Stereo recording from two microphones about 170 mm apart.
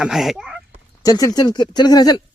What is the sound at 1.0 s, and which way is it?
Speech, 20° left (ahead or behind).